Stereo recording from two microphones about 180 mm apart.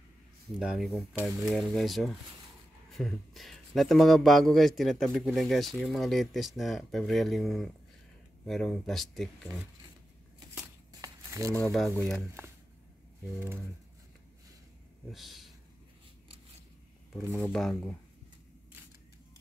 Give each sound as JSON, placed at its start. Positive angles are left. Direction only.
{"t": 0.6, "sound": "a man's voice", "side_deg": -5}
{"t": 10.5, "sound": "a sound", "side_deg": -15}
{"t": 12.0, "sound": "a man's voice", "side_deg": 5}
{"t": 15.0, "sound": "speech", "side_deg": 0}
{"t": 17.3, "sound": "a man's voice", "side_deg": 0}